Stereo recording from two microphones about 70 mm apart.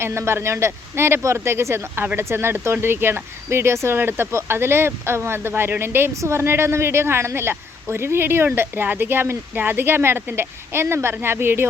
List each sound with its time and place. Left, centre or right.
0.0 s a woman's voice: right